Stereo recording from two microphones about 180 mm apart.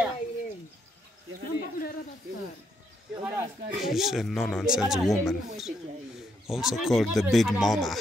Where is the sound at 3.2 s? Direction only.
10° right (ahead or behind).